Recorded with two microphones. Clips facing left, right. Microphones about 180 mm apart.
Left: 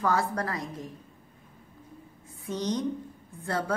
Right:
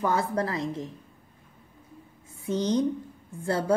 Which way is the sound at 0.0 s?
20° right (ahead or behind).